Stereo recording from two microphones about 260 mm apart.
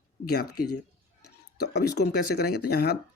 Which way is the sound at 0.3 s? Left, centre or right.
Left.